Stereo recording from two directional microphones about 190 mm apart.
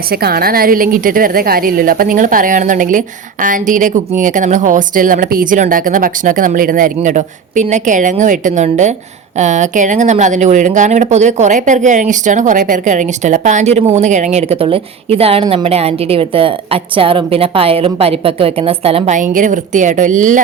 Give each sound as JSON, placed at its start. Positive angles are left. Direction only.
{"t": 0.1, "sound": "a woman's voice", "side_deg": -55}